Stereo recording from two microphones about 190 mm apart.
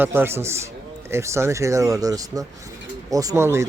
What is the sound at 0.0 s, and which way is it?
Speech, 10° right (ahead or behind).